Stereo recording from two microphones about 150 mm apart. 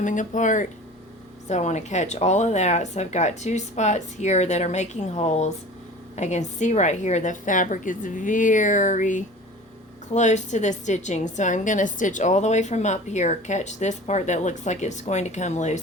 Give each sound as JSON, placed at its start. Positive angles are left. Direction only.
{"t": 0.0, "sound": "a woman's voice", "side_deg": 55}